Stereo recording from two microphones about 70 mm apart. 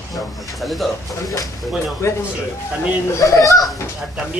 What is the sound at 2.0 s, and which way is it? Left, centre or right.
Speech, left.